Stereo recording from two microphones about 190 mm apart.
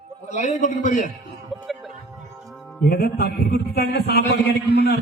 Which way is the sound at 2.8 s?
50° left (ahead or behind).